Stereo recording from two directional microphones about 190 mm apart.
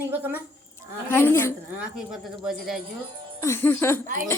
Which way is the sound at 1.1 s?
10° left (ahead or behind).